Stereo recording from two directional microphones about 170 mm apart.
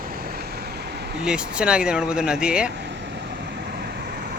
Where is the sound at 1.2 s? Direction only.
5° right (ahead or behind).